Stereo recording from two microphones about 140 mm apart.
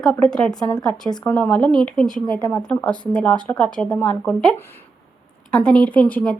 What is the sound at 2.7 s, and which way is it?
Speech, 10° left (ahead or behind).